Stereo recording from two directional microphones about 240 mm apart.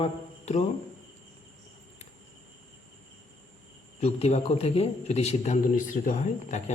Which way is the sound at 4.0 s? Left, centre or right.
Left.